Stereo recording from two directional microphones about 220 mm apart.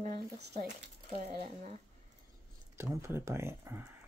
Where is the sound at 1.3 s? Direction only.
40° right (ahead or behind).